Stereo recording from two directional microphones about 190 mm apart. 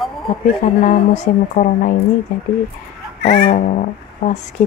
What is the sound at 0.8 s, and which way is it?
A woman's voice, 40° left (ahead or behind).